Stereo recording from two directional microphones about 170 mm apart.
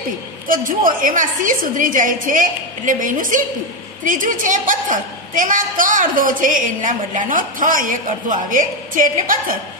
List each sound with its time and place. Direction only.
0.5 s a woman's voice: 55° right (ahead or behind)